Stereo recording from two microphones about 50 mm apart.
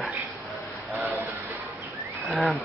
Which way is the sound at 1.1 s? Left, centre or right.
Right.